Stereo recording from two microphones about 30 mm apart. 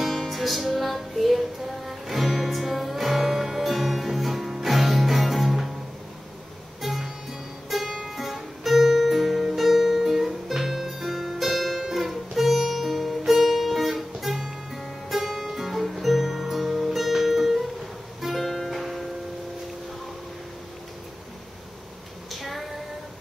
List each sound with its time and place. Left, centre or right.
0.0 s music: centre
6.8 s music: centre
22.3 s child singing: centre